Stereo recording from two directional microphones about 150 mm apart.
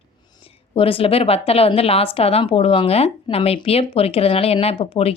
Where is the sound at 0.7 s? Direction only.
40° left (ahead or behind).